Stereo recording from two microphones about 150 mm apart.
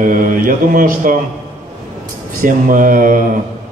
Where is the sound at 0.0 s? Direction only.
65° right (ahead or behind).